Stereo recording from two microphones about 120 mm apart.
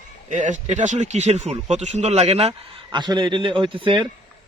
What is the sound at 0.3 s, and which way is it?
Speech, 90° right.